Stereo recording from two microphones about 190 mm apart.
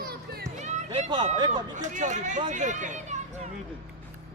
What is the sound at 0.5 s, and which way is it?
Speech, 35° right (ahead or behind).